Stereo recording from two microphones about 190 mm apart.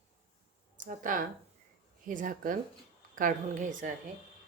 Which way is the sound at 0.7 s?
45° right (ahead or behind).